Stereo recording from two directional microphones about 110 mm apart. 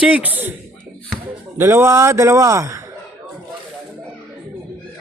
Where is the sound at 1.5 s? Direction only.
25° right (ahead or behind).